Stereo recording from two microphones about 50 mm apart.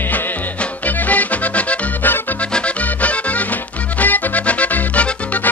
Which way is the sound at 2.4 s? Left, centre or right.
Left.